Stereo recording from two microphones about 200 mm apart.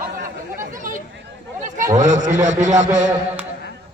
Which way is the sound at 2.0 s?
40° right (ahead or behind).